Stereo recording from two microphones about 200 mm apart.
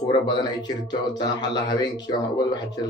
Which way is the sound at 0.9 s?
20° left (ahead or behind).